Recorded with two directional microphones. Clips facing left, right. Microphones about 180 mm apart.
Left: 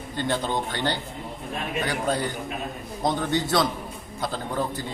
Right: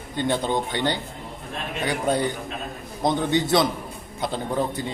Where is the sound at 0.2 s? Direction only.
15° right (ahead or behind).